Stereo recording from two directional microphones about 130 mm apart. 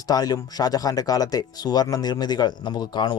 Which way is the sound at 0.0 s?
30° left (ahead or behind).